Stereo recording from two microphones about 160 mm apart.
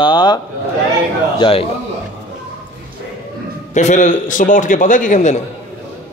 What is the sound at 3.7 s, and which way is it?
A man's voice, 50° left (ahead or behind).